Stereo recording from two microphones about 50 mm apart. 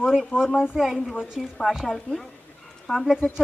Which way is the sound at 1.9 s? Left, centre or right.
Centre.